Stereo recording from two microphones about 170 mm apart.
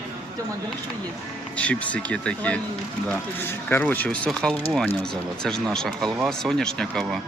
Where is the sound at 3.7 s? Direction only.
10° left (ahead or behind).